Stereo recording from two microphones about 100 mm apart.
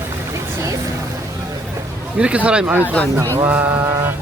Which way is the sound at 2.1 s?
10° right (ahead or behind).